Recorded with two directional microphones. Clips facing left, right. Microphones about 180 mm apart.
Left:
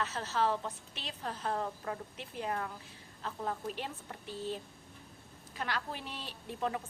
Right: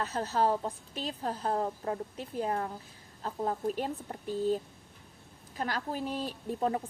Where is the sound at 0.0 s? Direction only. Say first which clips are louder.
Right 4 dB; 35° right (ahead or behind).